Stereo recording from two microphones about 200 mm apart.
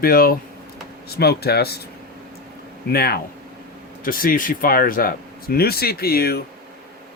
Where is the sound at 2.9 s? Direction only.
50° left (ahead or behind).